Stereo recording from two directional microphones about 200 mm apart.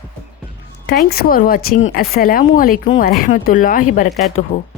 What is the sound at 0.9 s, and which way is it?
Speech, 50° left (ahead or behind).